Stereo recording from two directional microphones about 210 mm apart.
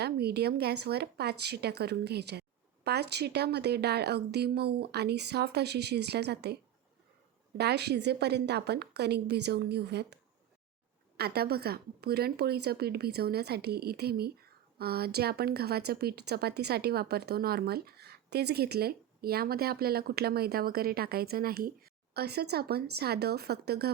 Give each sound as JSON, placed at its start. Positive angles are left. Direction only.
{"t": 0.0, "sound": "a woman's voice", "side_deg": -50}
{"t": 7.6, "sound": "a woman's voice", "side_deg": -50}
{"t": 11.2, "sound": "a woman's voice", "side_deg": -50}